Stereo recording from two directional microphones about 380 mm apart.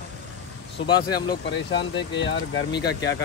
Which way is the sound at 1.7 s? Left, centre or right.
Left.